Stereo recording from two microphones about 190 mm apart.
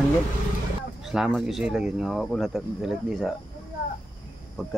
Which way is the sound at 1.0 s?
Centre (ahead or behind).